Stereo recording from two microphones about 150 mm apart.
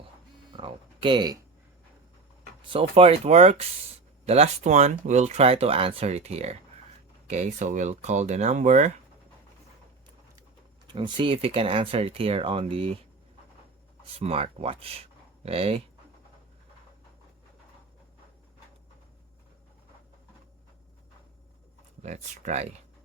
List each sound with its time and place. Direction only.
0.5 s speech: 35° right (ahead or behind)
2.6 s speech: 40° right (ahead or behind)
10.9 s speech: 35° right (ahead or behind)
14.2 s speech: 40° right (ahead or behind)
22.0 s speech: 50° right (ahead or behind)